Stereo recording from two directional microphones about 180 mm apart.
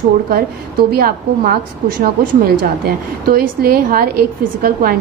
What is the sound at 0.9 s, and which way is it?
A woman's voice, 55° right (ahead or behind).